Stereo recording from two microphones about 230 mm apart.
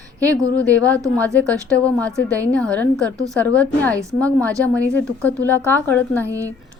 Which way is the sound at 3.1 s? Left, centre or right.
Centre.